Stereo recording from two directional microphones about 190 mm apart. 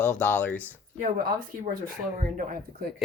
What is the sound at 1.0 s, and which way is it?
Speech, 50° right (ahead or behind).